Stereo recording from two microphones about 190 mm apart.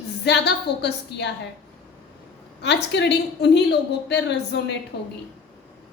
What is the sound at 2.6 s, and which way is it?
A woman's voice, 65° left (ahead or behind).